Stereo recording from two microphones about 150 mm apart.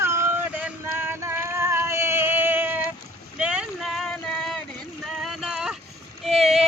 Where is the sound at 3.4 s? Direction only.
5° right (ahead or behind).